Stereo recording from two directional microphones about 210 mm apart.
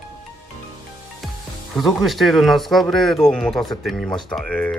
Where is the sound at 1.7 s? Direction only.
Centre (ahead or behind).